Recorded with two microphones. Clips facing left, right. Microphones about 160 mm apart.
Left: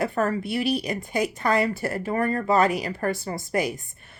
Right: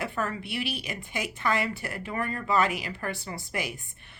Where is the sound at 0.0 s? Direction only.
40° left (ahead or behind).